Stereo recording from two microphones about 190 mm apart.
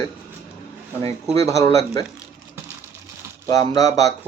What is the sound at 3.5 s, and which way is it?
Speech, 20° left (ahead or behind).